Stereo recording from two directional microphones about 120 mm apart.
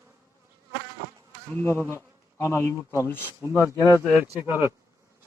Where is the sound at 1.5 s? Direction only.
15° left (ahead or behind).